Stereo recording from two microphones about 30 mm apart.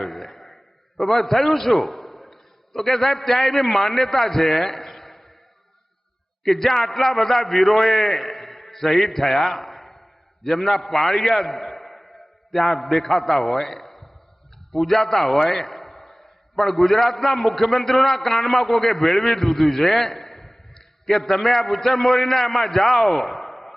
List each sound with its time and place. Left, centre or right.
0.0 s a man's voice: centre
6.4 s a man's voice: centre